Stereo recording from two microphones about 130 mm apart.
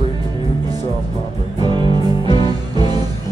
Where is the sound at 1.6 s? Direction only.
35° right (ahead or behind).